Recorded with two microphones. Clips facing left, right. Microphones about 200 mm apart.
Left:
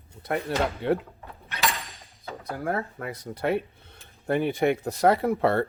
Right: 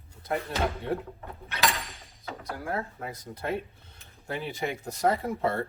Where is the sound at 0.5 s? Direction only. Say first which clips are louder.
Left 5 dB; 70° left (ahead or behind).